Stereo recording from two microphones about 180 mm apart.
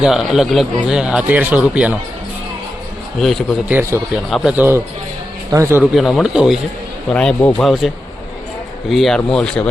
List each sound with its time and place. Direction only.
0.0 s speech: centre (ahead or behind)
3.2 s speech: centre (ahead or behind)
3.7 s a man's voice: 10° right (ahead or behind)
4.3 s a man's voice: centre (ahead or behind)
5.8 s speech: centre (ahead or behind)
8.9 s speech: centre (ahead or behind)